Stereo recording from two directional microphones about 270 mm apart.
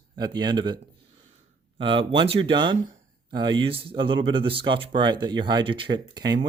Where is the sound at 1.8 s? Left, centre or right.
Centre.